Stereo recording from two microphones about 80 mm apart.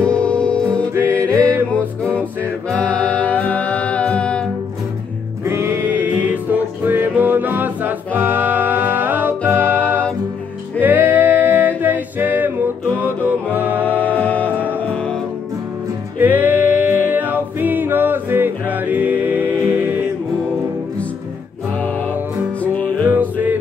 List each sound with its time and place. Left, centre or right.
0.0 s music: centre
5.4 s music: right
13.8 s music: centre
16.2 s music: right
22.6 s music: centre
23.0 s music: right